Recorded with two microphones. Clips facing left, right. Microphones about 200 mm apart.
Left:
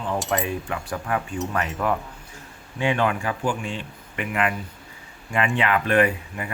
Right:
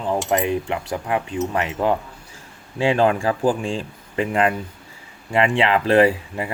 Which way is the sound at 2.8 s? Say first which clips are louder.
Right 5 dB; 30° right (ahead or behind).